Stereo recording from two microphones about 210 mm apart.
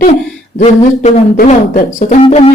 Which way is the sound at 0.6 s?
35° left (ahead or behind).